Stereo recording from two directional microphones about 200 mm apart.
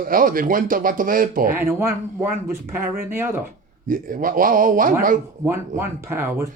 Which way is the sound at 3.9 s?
45° right (ahead or behind).